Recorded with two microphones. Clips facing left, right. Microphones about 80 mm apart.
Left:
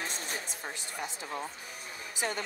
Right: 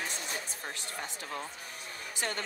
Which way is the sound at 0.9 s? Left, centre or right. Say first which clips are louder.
Left 3 dB; centre.